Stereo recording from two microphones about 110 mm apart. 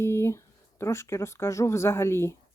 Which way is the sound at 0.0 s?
25° left (ahead or behind).